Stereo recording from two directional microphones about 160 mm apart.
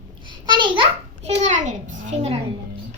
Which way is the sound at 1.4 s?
50° right (ahead or behind).